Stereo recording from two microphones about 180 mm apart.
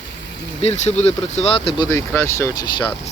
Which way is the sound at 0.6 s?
35° left (ahead or behind).